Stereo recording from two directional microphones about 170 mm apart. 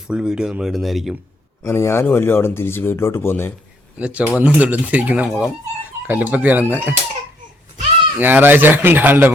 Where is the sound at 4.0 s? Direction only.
5° right (ahead or behind).